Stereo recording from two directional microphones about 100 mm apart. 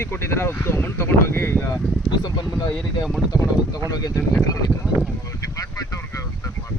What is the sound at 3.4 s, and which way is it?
Speech, 40° left (ahead or behind).